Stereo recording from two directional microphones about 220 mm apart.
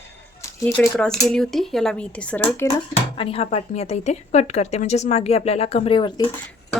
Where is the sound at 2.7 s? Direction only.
25° left (ahead or behind).